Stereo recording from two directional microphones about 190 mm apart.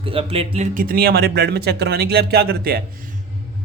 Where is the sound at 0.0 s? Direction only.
30° right (ahead or behind); by 2.8 s 55° right (ahead or behind).